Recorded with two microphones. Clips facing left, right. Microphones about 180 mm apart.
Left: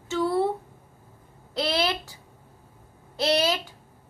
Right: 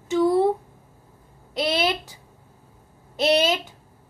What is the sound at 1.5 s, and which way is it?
A woman's voice, 20° right (ahead or behind).